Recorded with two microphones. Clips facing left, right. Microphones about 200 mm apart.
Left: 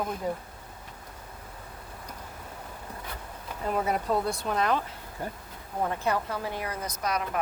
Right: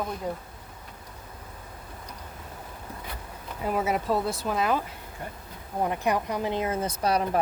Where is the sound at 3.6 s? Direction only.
5° right (ahead or behind).